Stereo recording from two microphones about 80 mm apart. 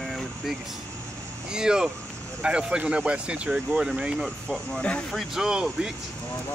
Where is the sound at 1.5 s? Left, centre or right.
Centre.